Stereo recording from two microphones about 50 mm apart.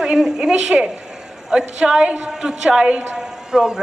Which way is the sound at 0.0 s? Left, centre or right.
Centre.